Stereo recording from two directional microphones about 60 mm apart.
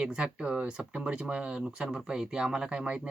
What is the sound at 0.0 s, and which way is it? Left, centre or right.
Speech, centre.